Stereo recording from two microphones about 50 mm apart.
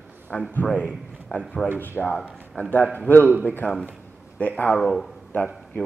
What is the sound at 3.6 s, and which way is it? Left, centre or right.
Speech, left.